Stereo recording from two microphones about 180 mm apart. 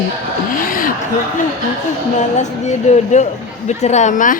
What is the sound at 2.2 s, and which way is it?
Speech, 40° left (ahead or behind).